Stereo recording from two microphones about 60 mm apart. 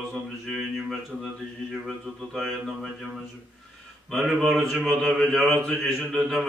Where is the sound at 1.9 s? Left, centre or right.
Centre.